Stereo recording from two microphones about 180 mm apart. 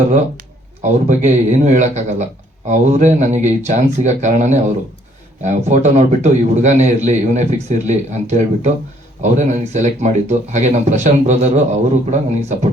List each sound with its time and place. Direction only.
0.8 s a man's voice: 40° right (ahead or behind)